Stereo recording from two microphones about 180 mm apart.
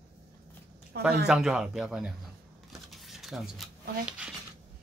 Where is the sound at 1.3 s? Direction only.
5° right (ahead or behind).